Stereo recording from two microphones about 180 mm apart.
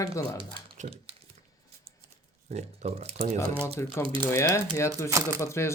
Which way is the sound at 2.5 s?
35° right (ahead or behind).